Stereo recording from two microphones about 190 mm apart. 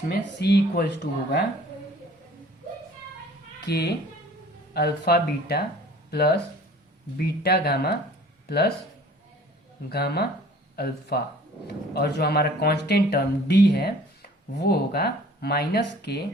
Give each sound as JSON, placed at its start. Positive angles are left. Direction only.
{"t": 0.1, "sound": "speech", "side_deg": 60}
{"t": 3.7, "sound": "speech", "side_deg": 60}
{"t": 9.9, "sound": "speech", "side_deg": 55}